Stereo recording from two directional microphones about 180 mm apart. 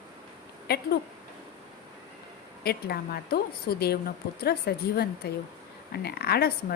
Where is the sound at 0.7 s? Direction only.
60° left (ahead or behind).